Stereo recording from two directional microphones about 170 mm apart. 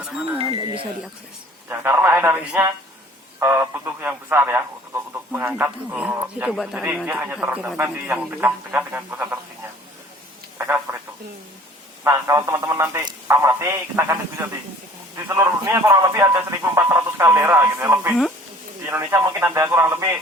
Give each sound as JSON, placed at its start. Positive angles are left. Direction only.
{"t": 0.0, "sound": "speech", "side_deg": -5}
{"t": 0.5, "sound": "speech", "side_deg": -30}
{"t": 1.8, "sound": "speech", "side_deg": -10}
{"t": 10.9, "sound": "telephone", "side_deg": -15}
{"t": 12.0, "sound": "speech", "side_deg": -15}